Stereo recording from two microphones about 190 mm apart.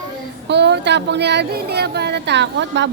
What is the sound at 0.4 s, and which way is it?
Speech, 65° right (ahead or behind).